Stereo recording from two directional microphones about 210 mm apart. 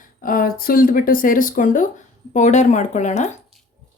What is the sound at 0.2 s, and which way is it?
Speech, 40° left (ahead or behind).